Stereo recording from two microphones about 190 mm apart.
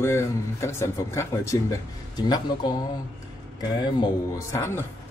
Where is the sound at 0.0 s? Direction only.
15° left (ahead or behind).